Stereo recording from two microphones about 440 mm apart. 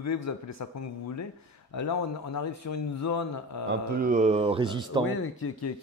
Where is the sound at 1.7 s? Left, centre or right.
Left.